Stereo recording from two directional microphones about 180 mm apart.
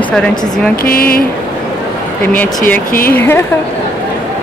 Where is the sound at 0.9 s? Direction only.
55° left (ahead or behind).